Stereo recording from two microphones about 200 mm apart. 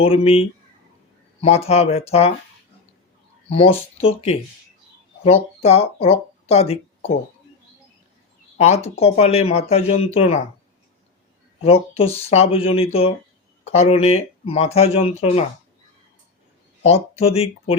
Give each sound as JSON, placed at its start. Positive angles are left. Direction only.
{"t": 0.0, "sound": "speech", "side_deg": 30}
{"t": 4.0, "sound": "speech", "side_deg": 30}
{"t": 8.5, "sound": "speech", "side_deg": 30}
{"t": 11.6, "sound": "speech", "side_deg": 30}
{"t": 16.8, "sound": "speech", "side_deg": 30}